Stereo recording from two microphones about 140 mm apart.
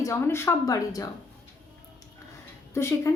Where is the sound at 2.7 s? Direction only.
20° left (ahead or behind).